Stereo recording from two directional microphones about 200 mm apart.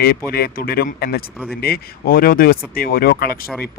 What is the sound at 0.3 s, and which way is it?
A man's voice, 50° left (ahead or behind).